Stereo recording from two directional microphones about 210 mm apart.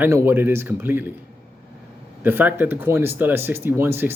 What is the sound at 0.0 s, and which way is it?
Speech, 10° right (ahead or behind).